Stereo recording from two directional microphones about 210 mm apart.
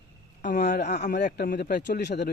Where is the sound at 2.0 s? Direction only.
55° left (ahead or behind).